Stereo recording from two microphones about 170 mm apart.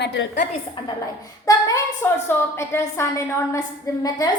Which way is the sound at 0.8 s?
30° left (ahead or behind).